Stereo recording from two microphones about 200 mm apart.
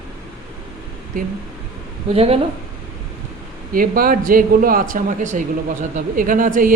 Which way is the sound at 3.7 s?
45° right (ahead or behind).